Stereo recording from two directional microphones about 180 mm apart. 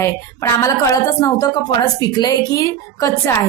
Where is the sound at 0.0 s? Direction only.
15° left (ahead or behind).